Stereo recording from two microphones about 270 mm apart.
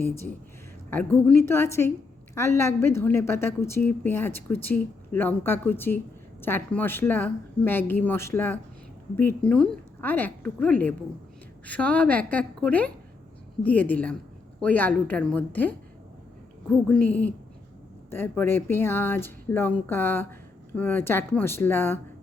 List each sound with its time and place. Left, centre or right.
0.9 s a woman's voice: centre